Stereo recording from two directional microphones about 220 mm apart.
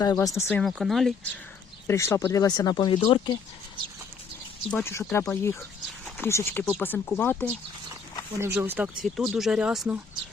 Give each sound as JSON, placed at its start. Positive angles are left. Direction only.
{"t": 0.0, "sound": "speech", "side_deg": 15}
{"t": 0.4, "sound": "speech", "side_deg": 0}
{"t": 4.7, "sound": "speech", "side_deg": 10}
{"t": 8.4, "sound": "speech", "side_deg": -10}